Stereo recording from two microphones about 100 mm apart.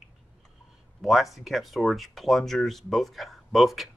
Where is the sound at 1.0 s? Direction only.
Centre (ahead or behind).